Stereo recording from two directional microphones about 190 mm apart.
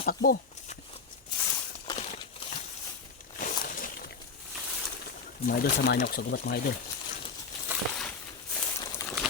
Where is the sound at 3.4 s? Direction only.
45° left (ahead or behind).